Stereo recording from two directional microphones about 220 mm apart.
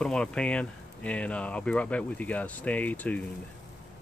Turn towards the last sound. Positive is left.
turn(degrees=5)  # may be behind; listen again after turning